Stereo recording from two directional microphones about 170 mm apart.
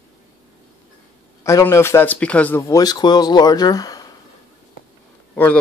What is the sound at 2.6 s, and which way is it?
Speech, 20° left (ahead or behind).